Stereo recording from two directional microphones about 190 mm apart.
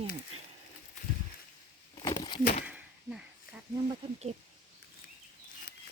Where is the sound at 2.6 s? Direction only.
5° right (ahead or behind).